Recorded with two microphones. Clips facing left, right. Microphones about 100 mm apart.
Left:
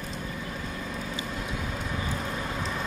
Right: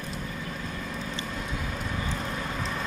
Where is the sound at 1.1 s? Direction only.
10° left (ahead or behind).